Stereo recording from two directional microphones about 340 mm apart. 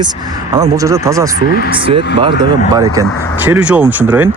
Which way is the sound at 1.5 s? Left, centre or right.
Left.